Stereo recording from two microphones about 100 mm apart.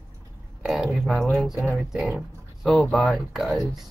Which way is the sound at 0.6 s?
Centre (ahead or behind).